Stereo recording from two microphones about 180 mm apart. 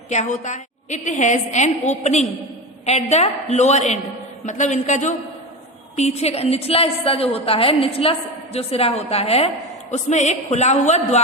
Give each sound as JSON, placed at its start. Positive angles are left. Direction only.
{"t": 0.1, "sound": "a woman's voice", "side_deg": 40}